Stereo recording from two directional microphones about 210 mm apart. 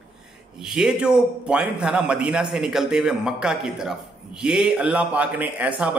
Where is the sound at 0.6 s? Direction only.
5° right (ahead or behind).